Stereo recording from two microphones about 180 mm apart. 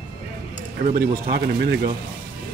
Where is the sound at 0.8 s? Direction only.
50° right (ahead or behind).